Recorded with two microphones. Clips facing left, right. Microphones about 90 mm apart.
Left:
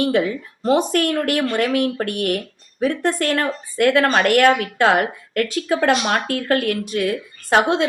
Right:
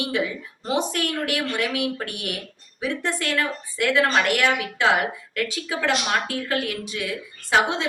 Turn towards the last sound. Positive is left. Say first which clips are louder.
# left 4 dB
turn(degrees=55)  # may be behind; listen again after turning